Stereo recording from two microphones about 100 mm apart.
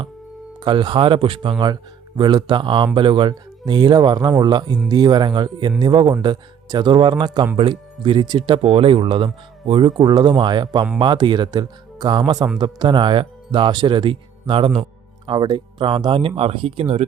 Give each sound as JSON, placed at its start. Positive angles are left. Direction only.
{"t": 0.6, "sound": "speech", "side_deg": -55}
{"t": 8.6, "sound": "speech", "side_deg": -70}
{"t": 15.3, "sound": "speech", "side_deg": -50}